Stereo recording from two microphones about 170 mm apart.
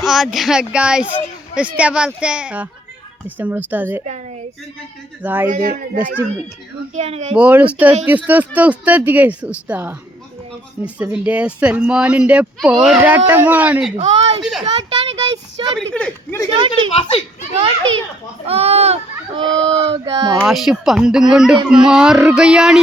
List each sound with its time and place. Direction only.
0.0 s speech: centre (ahead or behind)
5.2 s speech: 10° right (ahead or behind)
5.5 s speech: 55° right (ahead or behind)
6.9 s speech: 40° right (ahead or behind)
7.3 s speech: 10° right (ahead or behind)
13.9 s speech: 35° right (ahead or behind)
15.9 s speech: 5° left (ahead or behind)
16.9 s a child's voice: 30° left (ahead or behind)
17.6 s speech: 30° right (ahead or behind)
20.1 s speech: 25° right (ahead or behind)
20.4 s speech: centre (ahead or behind)